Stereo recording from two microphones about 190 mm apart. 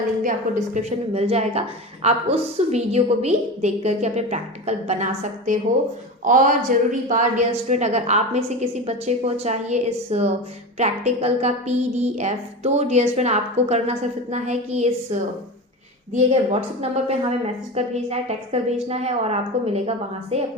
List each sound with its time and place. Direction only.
0.2 s a woman's voice: 45° right (ahead or behind)
16.1 s a woman's voice: 35° right (ahead or behind)